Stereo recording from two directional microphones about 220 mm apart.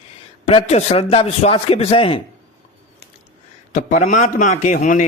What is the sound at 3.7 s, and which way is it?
A man's voice, 35° left (ahead or behind).